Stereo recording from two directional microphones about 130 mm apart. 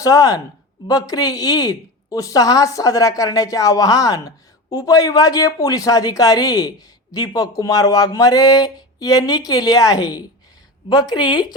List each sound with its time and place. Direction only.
0.0 s a woman's voice: 25° left (ahead or behind)